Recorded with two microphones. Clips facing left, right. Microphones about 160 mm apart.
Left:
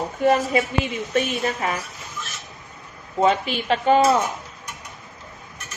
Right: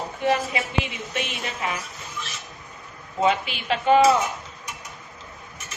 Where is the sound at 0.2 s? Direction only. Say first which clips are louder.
Left 5 dB; 45° left (ahead or behind).